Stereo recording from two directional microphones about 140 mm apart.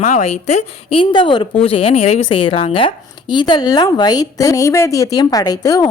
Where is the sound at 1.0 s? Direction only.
35° left (ahead or behind).